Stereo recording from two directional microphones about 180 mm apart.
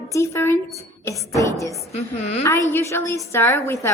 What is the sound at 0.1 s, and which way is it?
A woman's voice, 15° left (ahead or behind).